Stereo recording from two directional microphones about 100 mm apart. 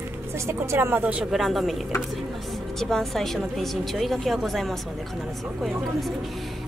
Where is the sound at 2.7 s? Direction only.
5° left (ahead or behind).